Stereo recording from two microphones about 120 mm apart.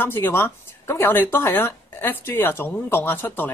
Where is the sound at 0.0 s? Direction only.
20° left (ahead or behind).